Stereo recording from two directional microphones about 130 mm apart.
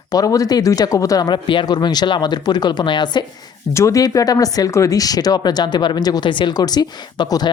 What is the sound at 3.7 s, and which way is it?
Speech, 25° left (ahead or behind).